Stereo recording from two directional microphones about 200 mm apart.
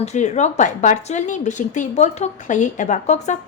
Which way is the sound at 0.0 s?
35° left (ahead or behind).